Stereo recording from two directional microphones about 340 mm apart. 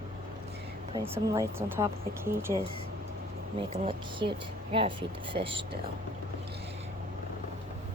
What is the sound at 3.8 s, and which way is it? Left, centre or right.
Speech, centre.